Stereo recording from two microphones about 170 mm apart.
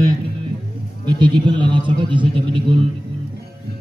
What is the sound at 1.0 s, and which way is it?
A man's voice, 30° right (ahead or behind).